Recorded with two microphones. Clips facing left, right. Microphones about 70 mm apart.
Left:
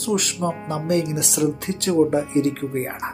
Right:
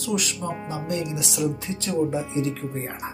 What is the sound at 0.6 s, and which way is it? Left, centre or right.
Speech, left.